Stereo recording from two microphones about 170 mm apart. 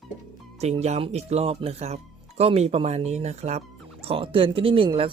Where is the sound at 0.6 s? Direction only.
40° right (ahead or behind).